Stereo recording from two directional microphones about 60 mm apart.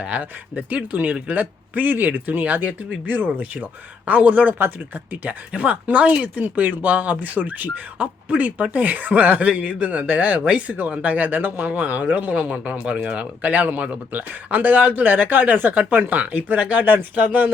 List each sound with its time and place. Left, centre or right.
0.0 s speech: right